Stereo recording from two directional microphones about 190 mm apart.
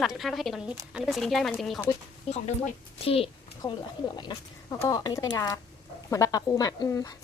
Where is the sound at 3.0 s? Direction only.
30° left (ahead or behind).